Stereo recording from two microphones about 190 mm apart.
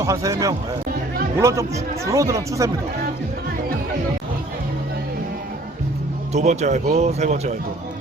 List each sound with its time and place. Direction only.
0.0 s speech: 15° right (ahead or behind)
6.3 s speech: 35° right (ahead or behind)